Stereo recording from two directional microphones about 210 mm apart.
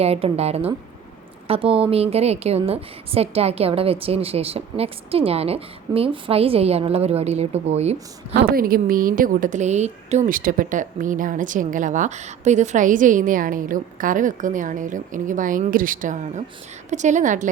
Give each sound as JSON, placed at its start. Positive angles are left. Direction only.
{"t": 0.0, "sound": "a woman's voice", "side_deg": -30}
{"t": 8.3, "sound": "speech", "side_deg": -50}